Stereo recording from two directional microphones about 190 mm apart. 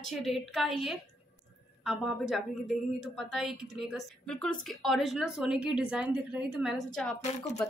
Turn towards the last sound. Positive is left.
turn(degrees=35)  # may be behind; listen again after turning